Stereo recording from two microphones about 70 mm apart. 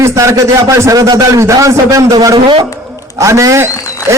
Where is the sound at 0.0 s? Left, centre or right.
Right.